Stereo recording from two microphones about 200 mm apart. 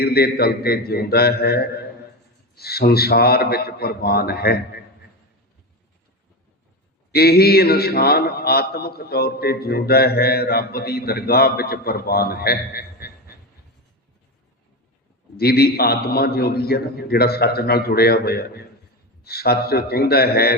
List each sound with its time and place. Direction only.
0.0 s a man's voice: 50° left (ahead or behind)
7.1 s a man's voice: 50° left (ahead or behind)
15.4 s a man's voice: 50° left (ahead or behind)